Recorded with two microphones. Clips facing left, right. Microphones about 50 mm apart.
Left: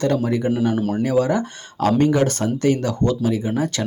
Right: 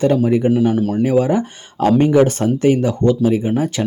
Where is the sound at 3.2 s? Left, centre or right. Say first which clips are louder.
Right 5 dB; right.